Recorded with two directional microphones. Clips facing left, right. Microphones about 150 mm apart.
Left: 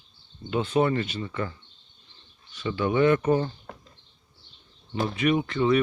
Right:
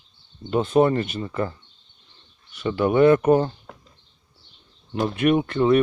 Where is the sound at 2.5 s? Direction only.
55° right (ahead or behind).